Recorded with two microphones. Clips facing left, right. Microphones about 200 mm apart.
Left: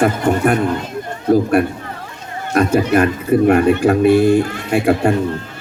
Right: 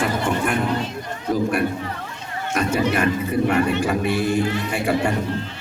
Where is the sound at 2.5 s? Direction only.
55° left (ahead or behind).